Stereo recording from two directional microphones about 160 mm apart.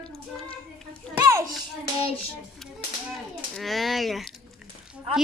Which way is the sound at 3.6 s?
Centre (ahead or behind).